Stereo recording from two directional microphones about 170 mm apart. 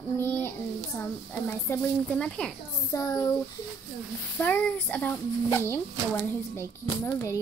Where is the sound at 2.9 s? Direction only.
20° left (ahead or behind).